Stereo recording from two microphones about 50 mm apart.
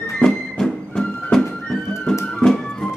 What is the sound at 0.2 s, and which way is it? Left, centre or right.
Music, centre.